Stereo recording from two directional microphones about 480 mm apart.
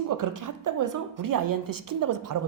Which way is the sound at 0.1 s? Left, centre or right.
Right.